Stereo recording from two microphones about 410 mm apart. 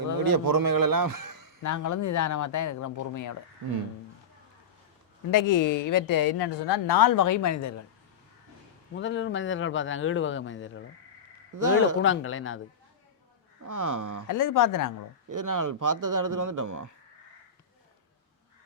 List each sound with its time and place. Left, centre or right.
0.2 s a man's voice: right
1.6 s speech: left
3.6 s speech: right
5.3 s speech: left
9.0 s speech: left
11.9 s speech: left
13.7 s speech: right
14.3 s speech: left
15.3 s speech: right